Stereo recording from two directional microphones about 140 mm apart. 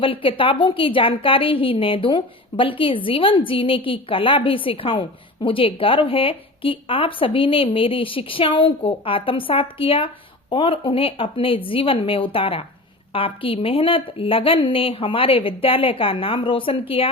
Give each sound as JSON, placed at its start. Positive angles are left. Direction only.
{"t": 0.0, "sound": "a woman's voice", "side_deg": 40}